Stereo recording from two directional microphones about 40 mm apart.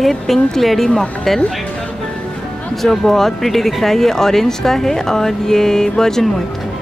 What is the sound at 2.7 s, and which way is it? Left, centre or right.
Speech, centre.